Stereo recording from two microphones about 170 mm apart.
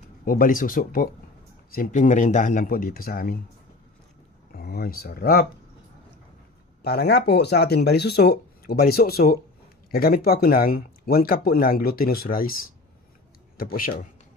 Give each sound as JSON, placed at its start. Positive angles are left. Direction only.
{"t": 0.2, "sound": "speech", "side_deg": 55}
{"t": 4.6, "sound": "speech", "side_deg": 60}
{"t": 6.8, "sound": "speech", "side_deg": 70}